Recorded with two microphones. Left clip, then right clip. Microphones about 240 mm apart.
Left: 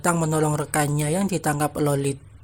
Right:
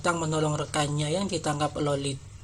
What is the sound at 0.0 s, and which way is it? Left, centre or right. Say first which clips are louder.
Speech: left 4 dB; left.